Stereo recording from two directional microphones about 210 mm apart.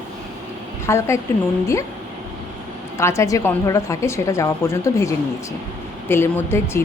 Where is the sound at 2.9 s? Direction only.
15° left (ahead or behind).